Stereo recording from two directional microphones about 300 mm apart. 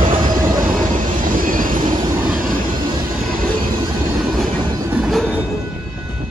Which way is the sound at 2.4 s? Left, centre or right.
Right.